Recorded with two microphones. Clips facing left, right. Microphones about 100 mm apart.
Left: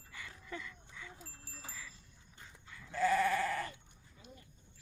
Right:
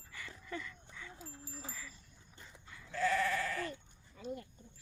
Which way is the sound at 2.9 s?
15° left (ahead or behind).